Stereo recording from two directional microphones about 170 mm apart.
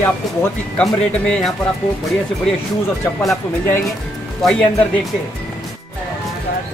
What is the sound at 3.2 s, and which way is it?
Speech, 15° left (ahead or behind).